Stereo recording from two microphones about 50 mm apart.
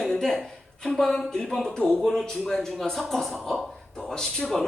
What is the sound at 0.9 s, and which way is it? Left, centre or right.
A man's voice, centre.